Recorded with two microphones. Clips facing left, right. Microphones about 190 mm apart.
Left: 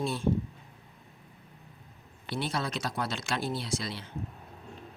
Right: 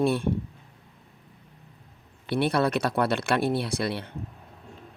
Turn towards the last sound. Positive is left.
turn(degrees=-60)  # may be behind; listen again after turning